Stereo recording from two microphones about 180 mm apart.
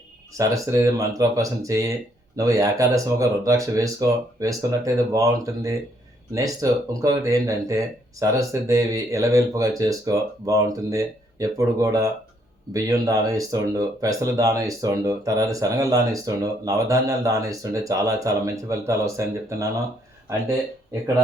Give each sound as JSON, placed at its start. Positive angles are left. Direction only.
{"t": 0.3, "sound": "speech", "side_deg": -20}